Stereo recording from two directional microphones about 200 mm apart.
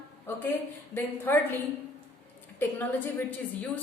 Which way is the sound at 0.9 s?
10° left (ahead or behind).